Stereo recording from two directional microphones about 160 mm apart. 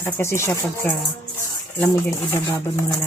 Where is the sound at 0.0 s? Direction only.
15° left (ahead or behind).